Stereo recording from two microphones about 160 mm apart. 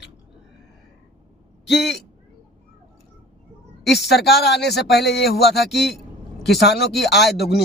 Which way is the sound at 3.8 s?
90° left.